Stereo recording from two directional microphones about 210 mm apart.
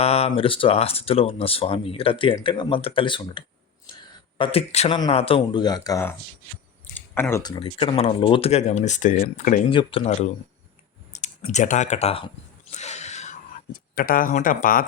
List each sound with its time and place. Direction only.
0.0 s speech: 30° left (ahead or behind)
9.6 s speech: 25° left (ahead or behind)
11.1 s a sound: 35° left (ahead or behind)